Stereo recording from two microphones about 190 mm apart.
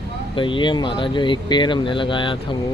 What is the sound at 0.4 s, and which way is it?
Speech, 25° left (ahead or behind).